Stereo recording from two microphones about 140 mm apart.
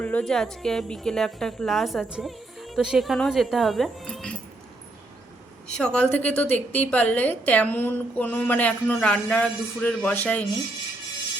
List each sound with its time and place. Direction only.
0.0 s a woman's voice: 10° left (ahead or behind)
5.7 s a woman's voice: 5° left (ahead or behind)